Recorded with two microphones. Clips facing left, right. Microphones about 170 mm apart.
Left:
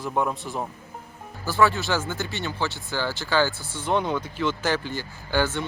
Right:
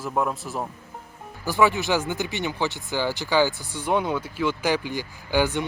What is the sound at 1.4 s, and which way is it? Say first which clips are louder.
Speech: right 1 dB; 15° right (ahead or behind).